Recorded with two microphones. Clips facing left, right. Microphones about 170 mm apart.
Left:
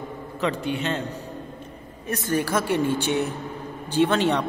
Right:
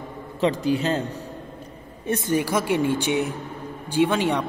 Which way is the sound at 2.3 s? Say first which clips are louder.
Even; 15° right (ahead or behind).